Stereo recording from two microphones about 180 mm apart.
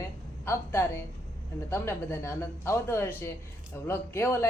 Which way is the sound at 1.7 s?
15° left (ahead or behind).